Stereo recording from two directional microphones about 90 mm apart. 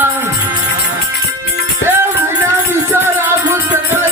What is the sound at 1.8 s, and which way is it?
Music, 25° right (ahead or behind).